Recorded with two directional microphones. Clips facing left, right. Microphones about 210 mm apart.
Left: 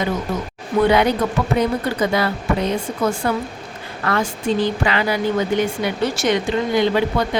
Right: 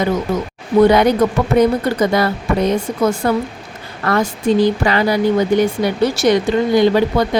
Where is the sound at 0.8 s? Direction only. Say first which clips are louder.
Right 5 dB; 40° right (ahead or behind).